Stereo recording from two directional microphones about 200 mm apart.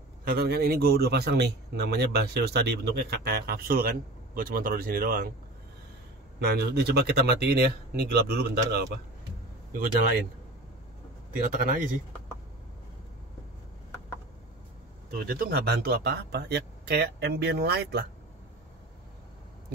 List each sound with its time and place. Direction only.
0.2 s a man's voice: 50° right (ahead or behind)
6.4 s a man's voice: 55° right (ahead or behind)
11.4 s speech: 40° right (ahead or behind)
15.0 s a man's voice: 45° right (ahead or behind)